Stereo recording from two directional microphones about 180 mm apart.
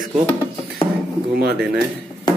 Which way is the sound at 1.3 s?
60° right (ahead or behind).